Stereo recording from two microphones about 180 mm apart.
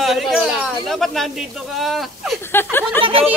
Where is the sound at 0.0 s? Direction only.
Centre (ahead or behind).